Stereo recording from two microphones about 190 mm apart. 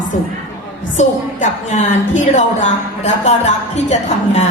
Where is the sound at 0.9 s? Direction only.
40° left (ahead or behind).